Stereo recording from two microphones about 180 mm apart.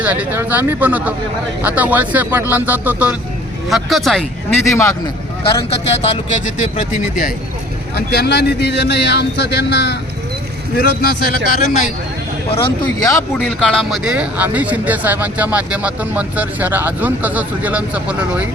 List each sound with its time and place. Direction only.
0.0 s speech: 10° right (ahead or behind)
4.7 s speech: 15° left (ahead or behind)
5.4 s speech: 35° left (ahead or behind)
7.9 s speech: 60° left (ahead or behind)
10.8 s speech: 55° left (ahead or behind)
12.5 s speech: 30° left (ahead or behind)
13.4 s speech: 5° left (ahead or behind)